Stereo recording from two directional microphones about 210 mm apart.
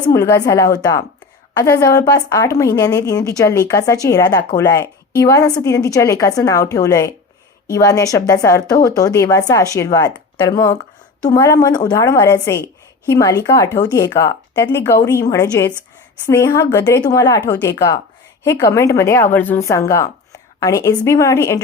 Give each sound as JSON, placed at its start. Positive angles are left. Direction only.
{"t": 0.0, "sound": "a woman's voice", "side_deg": 15}